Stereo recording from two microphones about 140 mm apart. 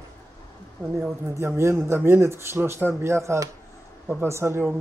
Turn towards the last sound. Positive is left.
turn(degrees=-15)  # may be behind; listen again after turning